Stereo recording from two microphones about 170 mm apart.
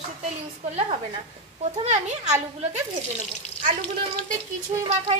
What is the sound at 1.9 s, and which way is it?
Speech, 40° right (ahead or behind).